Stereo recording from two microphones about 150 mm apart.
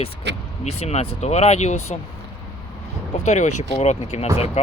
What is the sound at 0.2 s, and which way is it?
Vehicle, 90° right.